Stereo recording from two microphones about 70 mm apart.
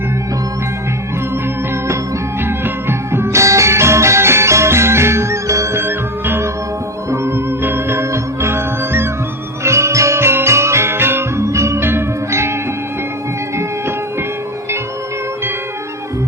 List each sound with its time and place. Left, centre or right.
2.4 s music: right
5.8 s music: right
13.6 s music: right